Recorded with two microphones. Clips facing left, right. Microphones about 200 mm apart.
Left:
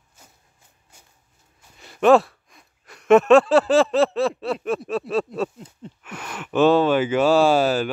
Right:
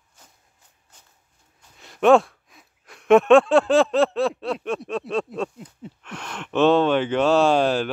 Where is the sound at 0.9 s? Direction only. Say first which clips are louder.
Left 2 dB; 10° left (ahead or behind).